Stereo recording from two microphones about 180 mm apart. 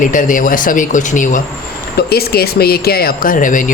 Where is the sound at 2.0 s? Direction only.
60° left (ahead or behind).